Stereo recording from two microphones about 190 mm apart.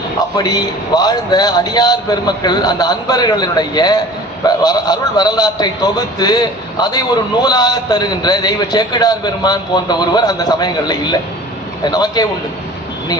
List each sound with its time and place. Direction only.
0.3 s a man's voice: 20° left (ahead or behind)